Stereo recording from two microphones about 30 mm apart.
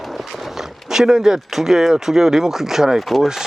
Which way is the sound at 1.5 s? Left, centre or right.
Centre.